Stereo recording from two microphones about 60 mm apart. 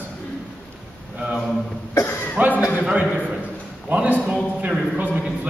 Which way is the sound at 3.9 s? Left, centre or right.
Right.